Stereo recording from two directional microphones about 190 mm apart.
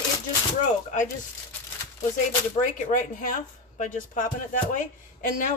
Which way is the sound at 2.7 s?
45° left (ahead or behind).